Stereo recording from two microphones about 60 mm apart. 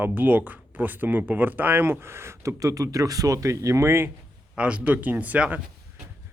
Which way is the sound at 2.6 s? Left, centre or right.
Right.